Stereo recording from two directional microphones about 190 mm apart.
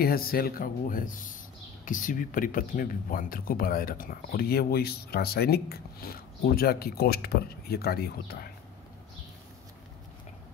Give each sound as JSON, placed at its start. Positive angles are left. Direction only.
{"t": 0.0, "sound": "speech", "side_deg": 50}